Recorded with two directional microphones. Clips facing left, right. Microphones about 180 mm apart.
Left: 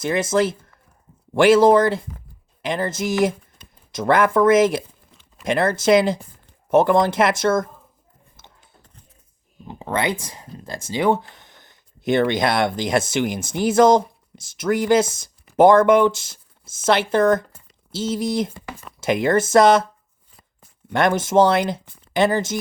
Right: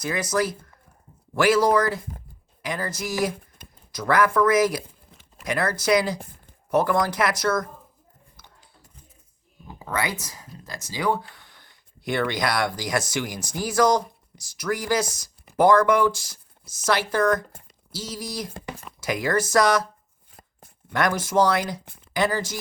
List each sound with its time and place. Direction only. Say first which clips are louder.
0.0 s speech: left 5 dB; 25° left (ahead or behind)
8.4 s a sound: left 4 dB; 25° left (ahead or behind)
9.6 s speech: left 5 dB; 25° left (ahead or behind)
20.9 s speech: left 5 dB; 25° left (ahead or behind)